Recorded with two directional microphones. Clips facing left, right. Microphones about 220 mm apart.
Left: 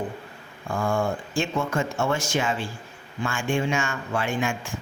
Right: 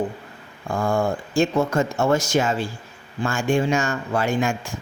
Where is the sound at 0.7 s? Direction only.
40° right (ahead or behind).